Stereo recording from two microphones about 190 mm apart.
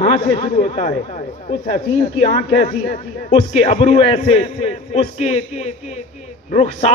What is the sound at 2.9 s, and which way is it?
A man's voice, 35° left (ahead or behind).